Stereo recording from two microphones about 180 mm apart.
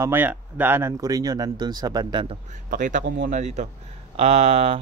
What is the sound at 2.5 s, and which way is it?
A man's voice, 45° right (ahead or behind).